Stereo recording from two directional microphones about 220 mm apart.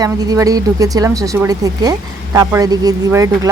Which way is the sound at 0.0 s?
15° right (ahead or behind).